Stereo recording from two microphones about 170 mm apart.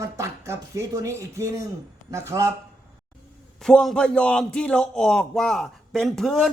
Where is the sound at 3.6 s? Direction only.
5° left (ahead or behind).